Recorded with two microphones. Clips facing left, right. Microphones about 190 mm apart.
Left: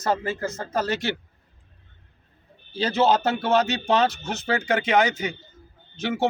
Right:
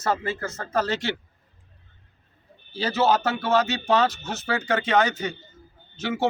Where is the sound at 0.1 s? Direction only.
15° left (ahead or behind).